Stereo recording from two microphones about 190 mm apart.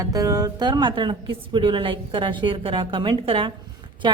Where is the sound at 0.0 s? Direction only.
15° right (ahead or behind).